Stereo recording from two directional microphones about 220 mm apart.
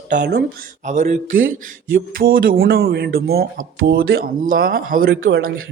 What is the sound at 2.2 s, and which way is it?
Speech, 40° right (ahead or behind).